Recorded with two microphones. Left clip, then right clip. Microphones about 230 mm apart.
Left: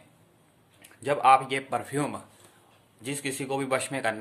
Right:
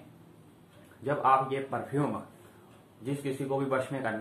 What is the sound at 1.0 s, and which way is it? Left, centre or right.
Speech, left.